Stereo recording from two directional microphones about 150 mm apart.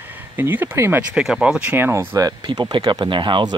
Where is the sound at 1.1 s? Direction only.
5° right (ahead or behind).